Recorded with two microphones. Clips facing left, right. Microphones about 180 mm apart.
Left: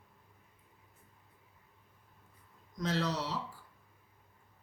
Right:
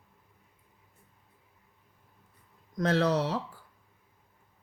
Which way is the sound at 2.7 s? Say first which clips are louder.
Right 8 dB; 60° right (ahead or behind).